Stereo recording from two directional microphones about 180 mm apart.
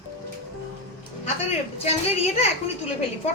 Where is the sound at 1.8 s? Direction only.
35° left (ahead or behind).